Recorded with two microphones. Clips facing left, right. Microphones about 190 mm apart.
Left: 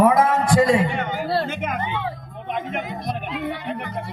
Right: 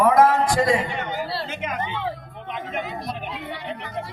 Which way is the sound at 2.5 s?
50° left (ahead or behind).